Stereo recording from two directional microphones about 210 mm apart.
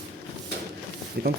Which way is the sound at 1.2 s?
50° right (ahead or behind).